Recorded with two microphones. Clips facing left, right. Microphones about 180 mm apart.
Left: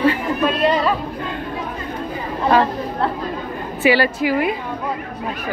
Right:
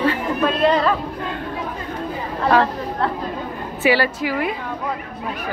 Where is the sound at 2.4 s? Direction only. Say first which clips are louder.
Left 1 dB; 15° left (ahead or behind).